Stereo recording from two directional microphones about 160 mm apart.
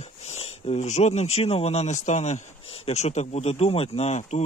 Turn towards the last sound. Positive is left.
turn(degrees=45)  # may be behind; listen again after turning